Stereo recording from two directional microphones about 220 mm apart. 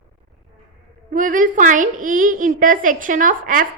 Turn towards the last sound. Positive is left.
turn(degrees=-35)  # may be behind; listen again after turning